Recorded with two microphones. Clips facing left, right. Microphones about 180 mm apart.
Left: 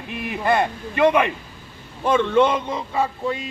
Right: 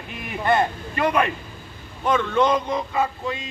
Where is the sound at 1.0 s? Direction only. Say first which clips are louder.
Left 4 dB; 25° left (ahead or behind).